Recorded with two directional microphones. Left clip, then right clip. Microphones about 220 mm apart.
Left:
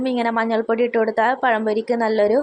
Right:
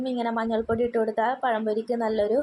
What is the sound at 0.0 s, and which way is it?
Speech, 15° left (ahead or behind).